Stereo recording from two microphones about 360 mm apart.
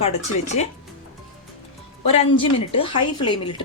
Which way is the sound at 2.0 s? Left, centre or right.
Centre.